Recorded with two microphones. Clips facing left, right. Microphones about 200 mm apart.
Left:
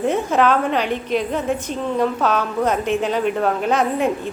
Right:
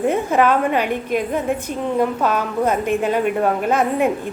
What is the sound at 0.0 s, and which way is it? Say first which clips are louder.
A woman's voice: right 1 dB; 10° right (ahead or behind).